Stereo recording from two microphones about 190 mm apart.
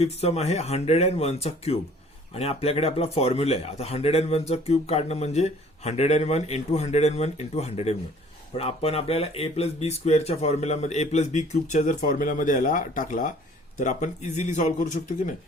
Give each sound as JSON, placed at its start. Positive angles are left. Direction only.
{"t": 0.0, "sound": "speech", "side_deg": 35}